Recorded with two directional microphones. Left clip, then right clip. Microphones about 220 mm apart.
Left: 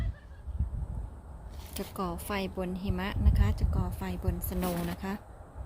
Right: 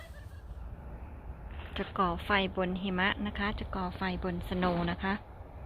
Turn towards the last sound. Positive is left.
turn(degrees=10)  # may be behind; listen again after turning